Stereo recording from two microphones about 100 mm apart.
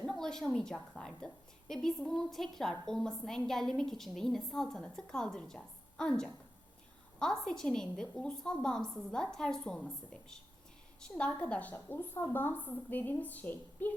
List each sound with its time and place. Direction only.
0.0 s a woman's voice: 5° left (ahead or behind)